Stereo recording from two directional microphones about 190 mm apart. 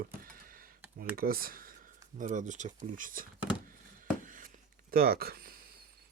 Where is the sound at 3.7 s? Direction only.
45° right (ahead or behind).